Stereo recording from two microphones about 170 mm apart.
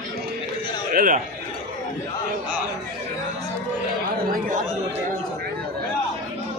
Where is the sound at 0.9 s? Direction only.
55° right (ahead or behind).